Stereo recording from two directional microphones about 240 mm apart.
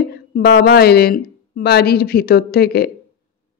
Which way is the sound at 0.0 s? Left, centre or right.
Left.